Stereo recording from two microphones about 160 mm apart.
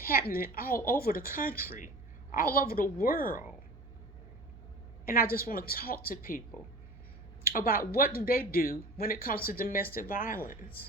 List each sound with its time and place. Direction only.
0.0 s a woman's voice: 70° left (ahead or behind)
5.0 s a woman's voice: 65° left (ahead or behind)
7.4 s speech: 65° left (ahead or behind)